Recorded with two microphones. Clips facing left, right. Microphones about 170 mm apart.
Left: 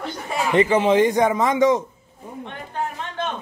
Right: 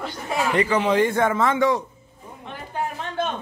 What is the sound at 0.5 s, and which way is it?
A man's voice, 25° left (ahead or behind).